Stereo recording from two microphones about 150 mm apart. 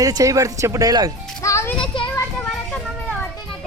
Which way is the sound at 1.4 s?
20° left (ahead or behind).